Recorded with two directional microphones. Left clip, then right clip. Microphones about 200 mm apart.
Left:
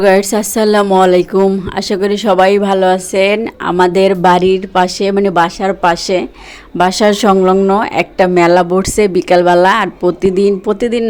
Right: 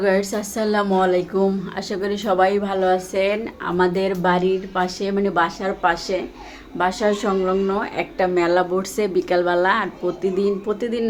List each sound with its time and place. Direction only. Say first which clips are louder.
0.0 s speech: left 10 dB; 45° left (ahead or behind)